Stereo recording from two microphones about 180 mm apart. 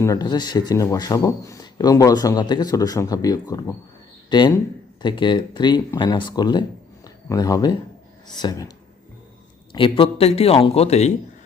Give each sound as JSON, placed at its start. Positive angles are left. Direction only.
{"t": 0.0, "sound": "speech", "side_deg": 20}
{"t": 9.7, "sound": "speech", "side_deg": 30}